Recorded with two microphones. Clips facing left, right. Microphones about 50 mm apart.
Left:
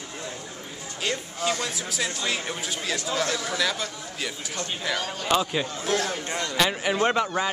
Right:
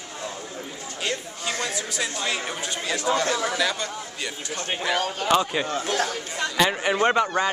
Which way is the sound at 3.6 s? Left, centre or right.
Centre.